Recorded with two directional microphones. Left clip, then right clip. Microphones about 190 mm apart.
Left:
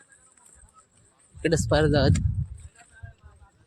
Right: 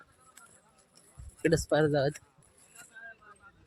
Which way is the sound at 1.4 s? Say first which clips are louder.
Left 4 dB; 15° left (ahead or behind).